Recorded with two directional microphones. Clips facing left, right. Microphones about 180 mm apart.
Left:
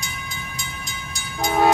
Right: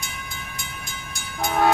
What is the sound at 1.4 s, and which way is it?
Train, 10° left (ahead or behind).